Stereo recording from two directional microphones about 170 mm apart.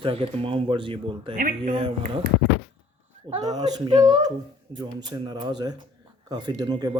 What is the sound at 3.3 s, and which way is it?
Speech, 25° right (ahead or behind).